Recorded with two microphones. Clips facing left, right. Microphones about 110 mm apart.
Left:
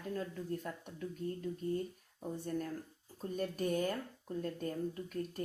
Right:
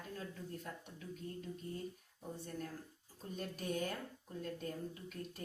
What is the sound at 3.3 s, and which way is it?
Speech, 50° left (ahead or behind).